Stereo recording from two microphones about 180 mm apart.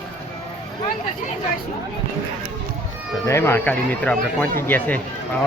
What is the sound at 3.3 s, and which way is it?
Speech, 15° left (ahead or behind).